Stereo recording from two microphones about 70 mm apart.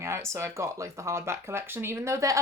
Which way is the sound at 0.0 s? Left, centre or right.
Right.